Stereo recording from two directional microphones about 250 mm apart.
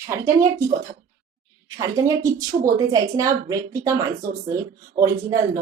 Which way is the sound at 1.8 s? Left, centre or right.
Centre.